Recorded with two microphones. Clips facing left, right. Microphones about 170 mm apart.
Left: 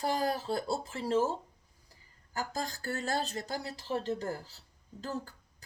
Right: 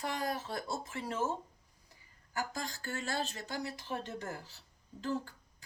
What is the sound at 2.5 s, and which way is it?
Speech, 40° left (ahead or behind).